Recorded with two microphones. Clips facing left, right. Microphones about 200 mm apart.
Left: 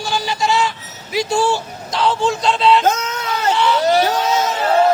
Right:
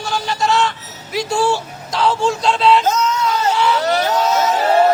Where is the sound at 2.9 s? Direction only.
55° left (ahead or behind).